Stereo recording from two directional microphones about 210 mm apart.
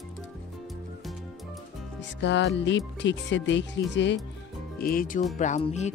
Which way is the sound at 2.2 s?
55° left (ahead or behind).